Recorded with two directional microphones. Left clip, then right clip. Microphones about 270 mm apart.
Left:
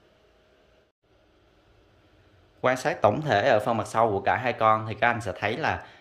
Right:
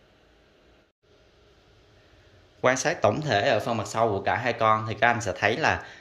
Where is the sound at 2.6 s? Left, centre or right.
Centre.